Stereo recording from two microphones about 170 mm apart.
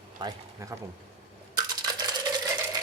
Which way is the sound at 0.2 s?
20° right (ahead or behind).